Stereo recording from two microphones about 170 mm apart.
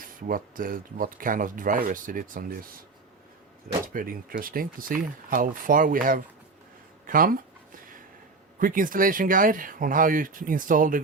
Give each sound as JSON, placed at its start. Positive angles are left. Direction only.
{"t": 0.0, "sound": "speech", "side_deg": -55}
{"t": 3.9, "sound": "speech", "side_deg": -55}
{"t": 8.5, "sound": "speech", "side_deg": -50}